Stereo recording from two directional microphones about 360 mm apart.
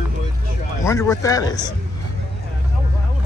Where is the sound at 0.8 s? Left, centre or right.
Centre.